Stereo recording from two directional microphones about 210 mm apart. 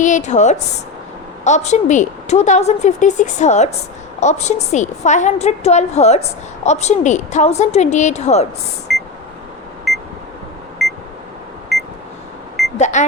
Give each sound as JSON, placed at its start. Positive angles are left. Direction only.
{"t": 0.0, "sound": "a woman's voice", "side_deg": 35}
{"t": 8.9, "sound": "beep", "side_deg": 0}
{"t": 12.7, "sound": "a sound", "side_deg": 35}